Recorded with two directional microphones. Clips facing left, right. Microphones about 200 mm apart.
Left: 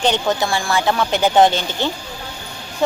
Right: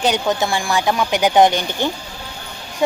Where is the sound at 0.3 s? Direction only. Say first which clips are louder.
Even; 20° right (ahead or behind).